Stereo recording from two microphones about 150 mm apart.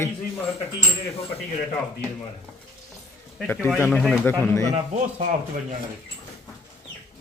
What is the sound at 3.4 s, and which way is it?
Speech, 10° left (ahead or behind).